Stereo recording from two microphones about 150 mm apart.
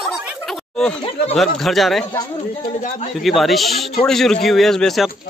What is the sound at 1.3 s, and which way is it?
Speech, centre (ahead or behind).